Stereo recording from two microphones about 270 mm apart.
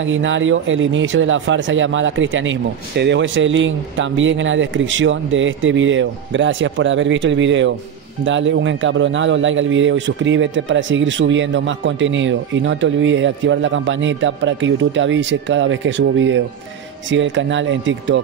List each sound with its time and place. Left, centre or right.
0.0 s a man's voice: right